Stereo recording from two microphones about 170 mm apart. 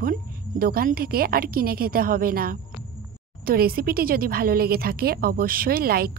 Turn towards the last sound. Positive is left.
turn(degrees=-60)  # may be behind; listen again after turning